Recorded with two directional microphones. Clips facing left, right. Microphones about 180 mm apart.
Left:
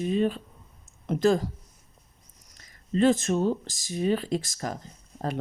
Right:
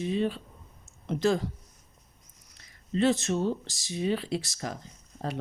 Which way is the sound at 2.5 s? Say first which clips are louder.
Left 3 dB; 45° left (ahead or behind).